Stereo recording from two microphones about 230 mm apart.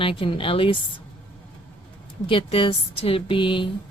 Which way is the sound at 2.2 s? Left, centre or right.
Left.